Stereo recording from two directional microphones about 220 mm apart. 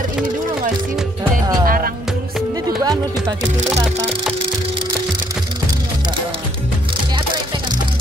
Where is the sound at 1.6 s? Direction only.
40° right (ahead or behind).